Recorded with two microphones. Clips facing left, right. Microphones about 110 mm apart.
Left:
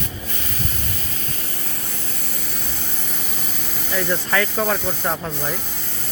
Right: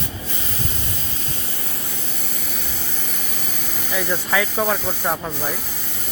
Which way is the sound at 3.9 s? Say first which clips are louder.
Left 1 dB; 10° right (ahead or behind).